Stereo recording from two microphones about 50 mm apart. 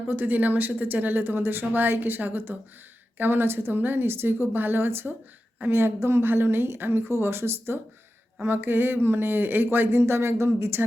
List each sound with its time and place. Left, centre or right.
0.1 s speech: right
5.7 s speech: right